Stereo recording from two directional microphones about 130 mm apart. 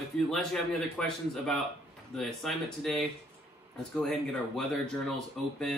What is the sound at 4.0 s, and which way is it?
Speech, 5° left (ahead or behind).